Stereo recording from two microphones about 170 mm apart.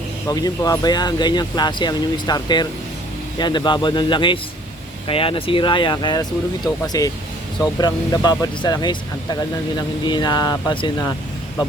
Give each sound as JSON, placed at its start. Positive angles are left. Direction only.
{"t": 0.3, "sound": "speech", "side_deg": 20}